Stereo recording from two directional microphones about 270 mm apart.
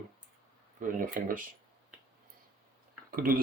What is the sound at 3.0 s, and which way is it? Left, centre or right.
Speech, right.